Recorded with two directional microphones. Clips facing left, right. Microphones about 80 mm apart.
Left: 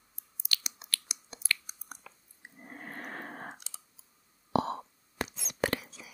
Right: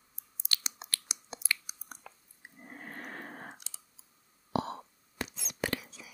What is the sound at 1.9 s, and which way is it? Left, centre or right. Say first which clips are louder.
Chewing: left 2 dB; centre.